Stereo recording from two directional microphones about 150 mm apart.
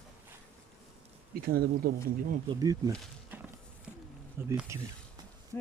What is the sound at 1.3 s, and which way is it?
Speech, 85° right.